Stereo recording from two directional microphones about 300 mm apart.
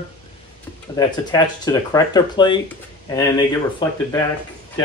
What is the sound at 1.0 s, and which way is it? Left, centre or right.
Speech, centre.